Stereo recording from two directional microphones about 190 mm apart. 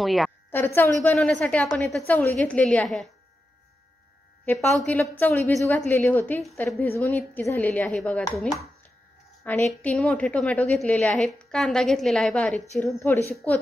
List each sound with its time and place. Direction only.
0.0 s a woman's voice: centre (ahead or behind)
0.5 s a woman's voice: 10° left (ahead or behind)
4.5 s speech: 10° left (ahead or behind)
9.4 s a woman's voice: 10° left (ahead or behind)